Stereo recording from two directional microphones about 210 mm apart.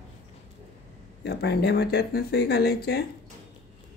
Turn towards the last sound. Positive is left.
turn(degrees=50)  # may be behind; listen again after turning